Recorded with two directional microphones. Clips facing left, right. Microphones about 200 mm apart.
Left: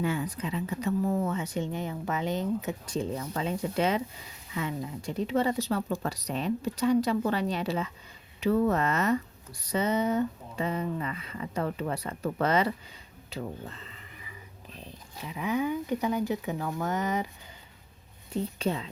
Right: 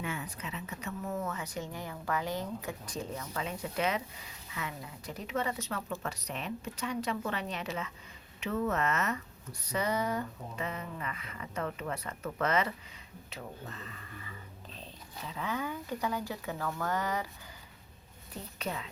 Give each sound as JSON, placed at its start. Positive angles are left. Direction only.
{"t": 0.0, "sound": "speech", "side_deg": 35}
{"t": 18.6, "sound": "speech", "side_deg": 30}